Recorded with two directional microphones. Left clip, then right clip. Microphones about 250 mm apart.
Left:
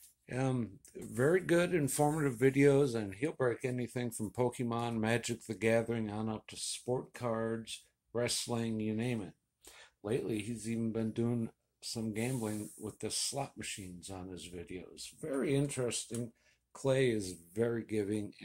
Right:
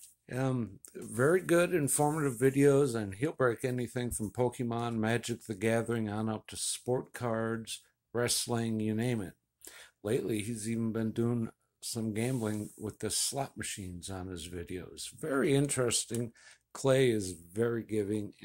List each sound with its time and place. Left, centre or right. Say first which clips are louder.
0.3 s speech: right 2 dB; centre